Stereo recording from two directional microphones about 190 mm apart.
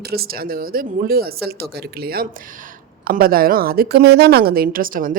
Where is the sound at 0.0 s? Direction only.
55° right (ahead or behind).